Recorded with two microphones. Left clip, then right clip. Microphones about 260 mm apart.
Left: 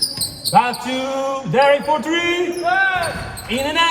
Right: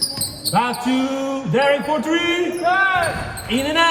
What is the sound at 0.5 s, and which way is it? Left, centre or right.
Basketball bounce, left.